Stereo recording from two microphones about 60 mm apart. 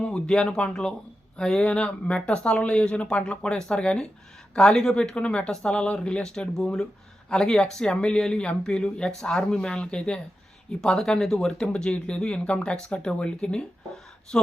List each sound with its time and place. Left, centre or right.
0.0 s speech: centre